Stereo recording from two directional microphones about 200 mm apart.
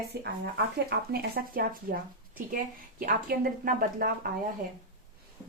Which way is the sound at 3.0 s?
45° right (ahead or behind).